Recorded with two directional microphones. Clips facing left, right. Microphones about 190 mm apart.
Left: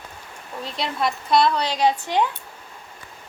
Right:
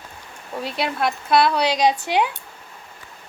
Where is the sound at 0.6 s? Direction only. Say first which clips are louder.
Right 2 dB; 5° right (ahead or behind).